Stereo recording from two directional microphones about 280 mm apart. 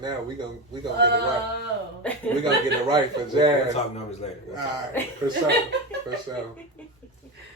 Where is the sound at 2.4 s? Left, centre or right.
Centre.